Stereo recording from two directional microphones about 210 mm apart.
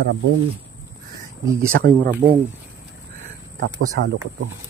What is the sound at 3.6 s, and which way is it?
Speech, 50° right (ahead or behind).